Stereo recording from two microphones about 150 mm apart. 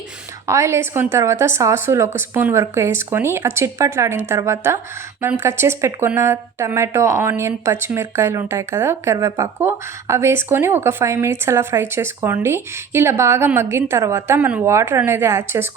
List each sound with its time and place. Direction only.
0.4 s speech: 20° right (ahead or behind)